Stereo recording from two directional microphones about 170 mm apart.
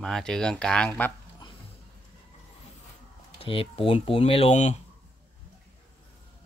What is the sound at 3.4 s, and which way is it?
Speech, 35° left (ahead or behind).